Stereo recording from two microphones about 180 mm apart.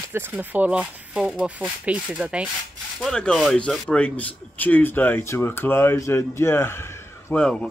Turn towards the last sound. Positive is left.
turn(degrees=10)  # may be behind; listen again after turning